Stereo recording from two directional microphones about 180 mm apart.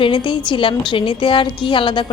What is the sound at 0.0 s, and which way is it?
A woman's voice, 25° left (ahead or behind).